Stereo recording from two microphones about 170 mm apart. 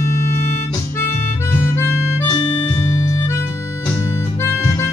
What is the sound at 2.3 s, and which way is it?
Music, 30° left (ahead or behind).